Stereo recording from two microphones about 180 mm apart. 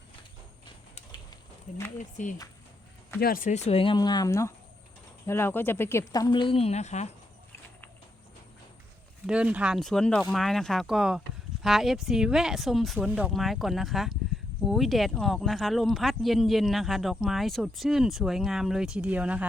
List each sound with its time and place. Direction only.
1.7 s speech: 40° left (ahead or behind)
9.2 s speech: 5° right (ahead or behind)